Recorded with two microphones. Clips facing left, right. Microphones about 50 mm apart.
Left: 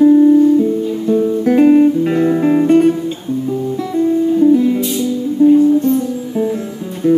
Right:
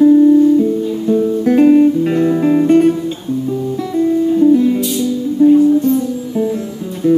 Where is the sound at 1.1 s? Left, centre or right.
Centre.